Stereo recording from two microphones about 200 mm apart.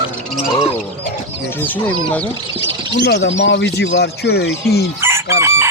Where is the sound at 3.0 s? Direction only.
60° left (ahead or behind).